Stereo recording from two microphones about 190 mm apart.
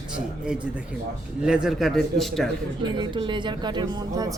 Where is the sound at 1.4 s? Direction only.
5° right (ahead or behind).